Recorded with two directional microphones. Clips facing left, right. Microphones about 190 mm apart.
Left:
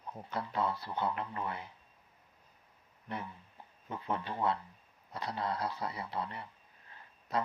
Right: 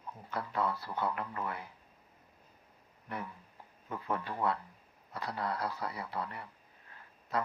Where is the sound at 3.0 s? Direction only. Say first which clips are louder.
Even; 25° left (ahead or behind).